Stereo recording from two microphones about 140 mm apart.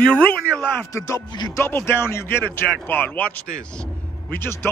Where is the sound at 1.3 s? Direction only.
30° left (ahead or behind).